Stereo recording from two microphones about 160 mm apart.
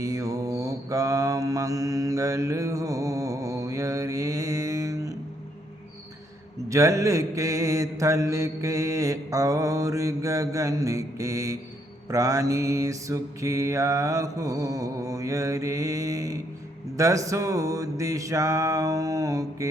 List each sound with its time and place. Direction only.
0.0 s mantra: 20° right (ahead or behind)
6.7 s mantra: 20° right (ahead or behind)